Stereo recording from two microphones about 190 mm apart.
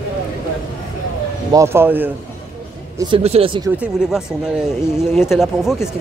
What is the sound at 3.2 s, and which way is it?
Speech, 30° right (ahead or behind).